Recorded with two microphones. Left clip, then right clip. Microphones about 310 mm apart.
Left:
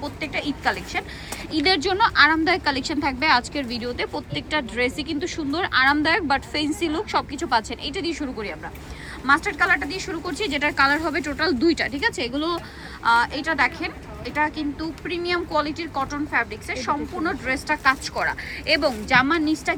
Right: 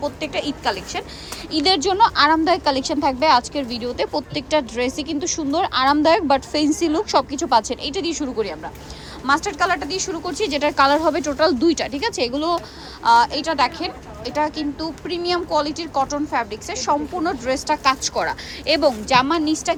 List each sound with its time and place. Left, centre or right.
0.0 s speech: centre
6.6 s a woman's voice: right
7.0 s speech: centre